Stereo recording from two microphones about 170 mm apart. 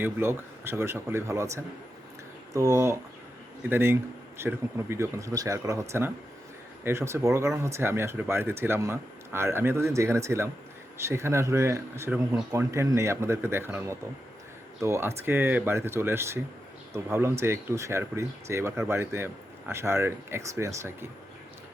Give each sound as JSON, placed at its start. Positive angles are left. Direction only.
{"t": 0.0, "sound": "speech", "side_deg": -15}